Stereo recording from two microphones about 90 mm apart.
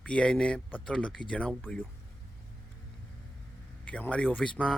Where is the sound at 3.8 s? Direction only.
15° left (ahead or behind).